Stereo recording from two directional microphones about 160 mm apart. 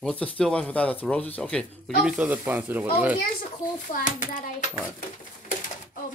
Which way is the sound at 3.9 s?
55° left (ahead or behind).